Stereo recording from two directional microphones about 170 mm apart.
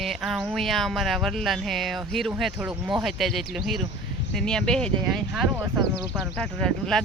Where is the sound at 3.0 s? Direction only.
Centre (ahead or behind).